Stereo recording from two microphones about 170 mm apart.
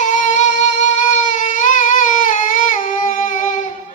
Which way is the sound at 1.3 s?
50° left (ahead or behind).